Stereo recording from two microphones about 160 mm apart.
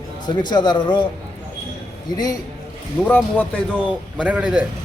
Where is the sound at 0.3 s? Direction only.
25° left (ahead or behind).